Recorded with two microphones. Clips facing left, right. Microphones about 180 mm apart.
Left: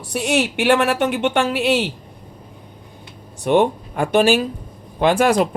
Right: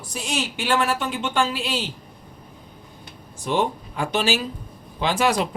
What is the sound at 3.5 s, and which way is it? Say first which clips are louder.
Speech: left 7 dB; 60° left (ahead or behind).